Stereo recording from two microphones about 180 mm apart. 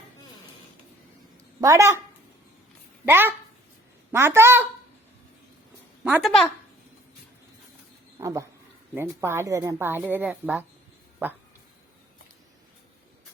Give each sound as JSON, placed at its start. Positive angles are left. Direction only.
{"t": 1.6, "sound": "a woman's voice", "side_deg": -15}
{"t": 3.1, "sound": "a woman's voice", "side_deg": -10}
{"t": 6.1, "sound": "a woman's voice", "side_deg": -10}
{"t": 8.2, "sound": "a woman's voice", "side_deg": -20}